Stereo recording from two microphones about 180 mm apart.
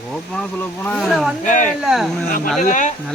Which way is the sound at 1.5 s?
45° left (ahead or behind).